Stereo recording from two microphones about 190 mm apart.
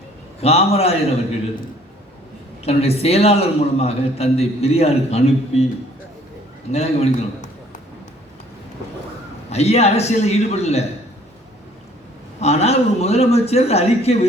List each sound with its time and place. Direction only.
0.4 s a man's voice: 30° left (ahead or behind)
2.6 s a man's voice: 30° left (ahead or behind)
6.7 s a man's voice: 35° left (ahead or behind)
9.5 s a man's voice: 35° left (ahead or behind)
12.4 s a man's voice: 35° left (ahead or behind)